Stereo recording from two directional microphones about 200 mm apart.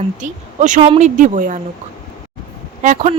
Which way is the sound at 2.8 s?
40° right (ahead or behind).